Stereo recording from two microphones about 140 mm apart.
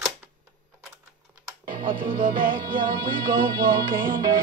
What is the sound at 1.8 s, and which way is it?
Music, 35° right (ahead or behind).